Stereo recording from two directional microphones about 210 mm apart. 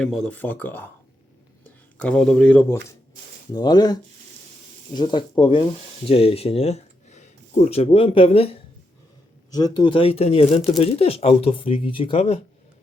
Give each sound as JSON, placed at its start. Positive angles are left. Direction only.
{"t": 0.0, "sound": "speech", "side_deg": 5}
{"t": 3.5, "sound": "speech", "side_deg": 20}
{"t": 4.9, "sound": "speech", "side_deg": 20}
{"t": 9.5, "sound": "speech", "side_deg": 20}